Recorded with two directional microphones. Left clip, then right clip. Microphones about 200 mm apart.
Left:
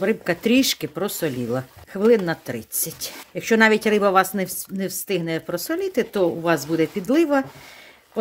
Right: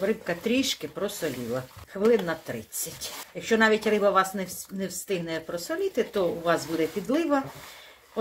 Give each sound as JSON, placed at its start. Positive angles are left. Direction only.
{"t": 0.0, "sound": "speech", "side_deg": 60}